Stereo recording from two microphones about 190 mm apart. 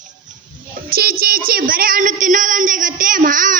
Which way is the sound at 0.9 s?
50° right (ahead or behind).